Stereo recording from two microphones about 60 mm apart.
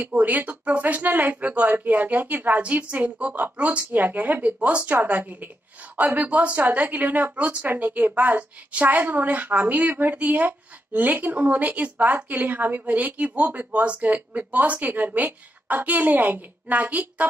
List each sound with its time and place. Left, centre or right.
0.0 s a woman's voice: right